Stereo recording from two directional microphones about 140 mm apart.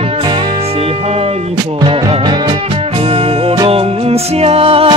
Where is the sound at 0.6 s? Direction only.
45° right (ahead or behind).